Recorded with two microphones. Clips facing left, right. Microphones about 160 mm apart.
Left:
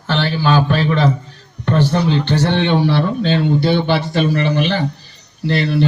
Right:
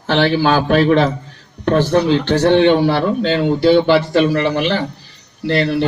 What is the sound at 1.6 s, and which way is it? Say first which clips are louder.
Speech: right 3 dB; 85° right.